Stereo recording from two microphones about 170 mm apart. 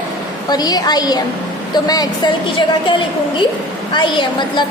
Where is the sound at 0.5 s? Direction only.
25° left (ahead or behind).